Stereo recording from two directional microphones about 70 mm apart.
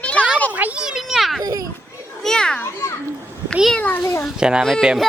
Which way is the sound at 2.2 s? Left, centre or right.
Centre.